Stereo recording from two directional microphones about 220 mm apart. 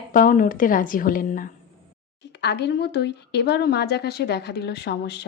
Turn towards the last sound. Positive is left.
turn(degrees=50)  # may be behind; listen again after turning